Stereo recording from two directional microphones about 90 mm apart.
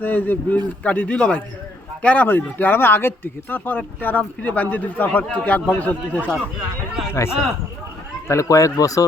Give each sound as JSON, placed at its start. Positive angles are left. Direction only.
{"t": 0.0, "sound": "speech", "side_deg": 20}
{"t": 7.1, "sound": "speech", "side_deg": 30}